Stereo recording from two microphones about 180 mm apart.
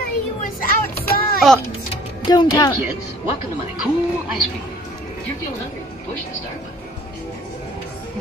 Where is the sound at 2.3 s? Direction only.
20° left (ahead or behind).